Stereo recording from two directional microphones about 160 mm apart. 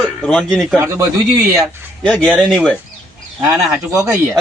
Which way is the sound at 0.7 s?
15° right (ahead or behind).